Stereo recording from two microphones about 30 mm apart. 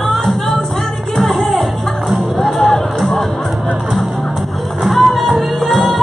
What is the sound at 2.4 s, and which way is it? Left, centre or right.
Music, centre.